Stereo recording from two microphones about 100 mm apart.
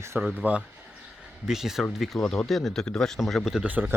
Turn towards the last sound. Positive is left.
turn(degrees=-15)  # may be behind; listen again after turning